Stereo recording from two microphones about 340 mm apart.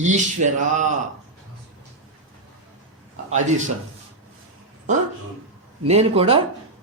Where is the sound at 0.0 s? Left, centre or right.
Right.